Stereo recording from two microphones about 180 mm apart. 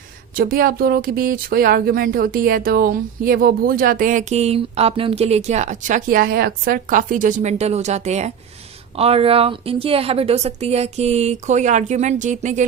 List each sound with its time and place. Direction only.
0.3 s a woman's voice: 55° right (ahead or behind)